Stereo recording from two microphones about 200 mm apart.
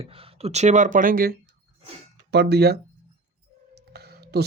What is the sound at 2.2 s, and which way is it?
Speech, 55° right (ahead or behind).